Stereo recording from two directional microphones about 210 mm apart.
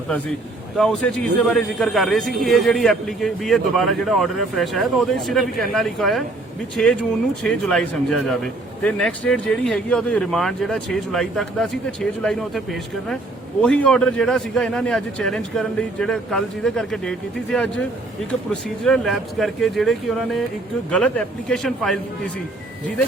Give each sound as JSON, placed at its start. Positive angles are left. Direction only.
{"t": 0.8, "sound": "a man's voice", "side_deg": 5}
{"t": 18.9, "sound": "a man's voice", "side_deg": 0}